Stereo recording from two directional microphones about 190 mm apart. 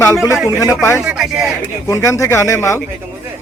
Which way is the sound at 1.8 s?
15° left (ahead or behind).